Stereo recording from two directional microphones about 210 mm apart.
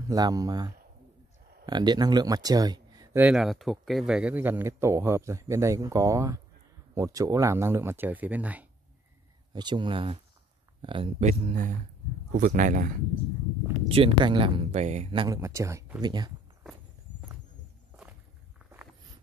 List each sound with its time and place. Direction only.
0.1 s speech: 15° right (ahead or behind)
9.5 s speech: 20° right (ahead or behind); by 12.9 s 40° right (ahead or behind)
13.8 s speech: 25° right (ahead or behind)